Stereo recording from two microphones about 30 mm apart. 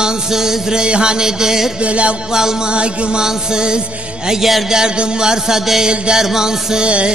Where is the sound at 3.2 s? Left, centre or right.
Right.